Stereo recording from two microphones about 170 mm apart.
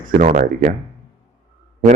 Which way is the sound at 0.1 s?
55° right (ahead or behind).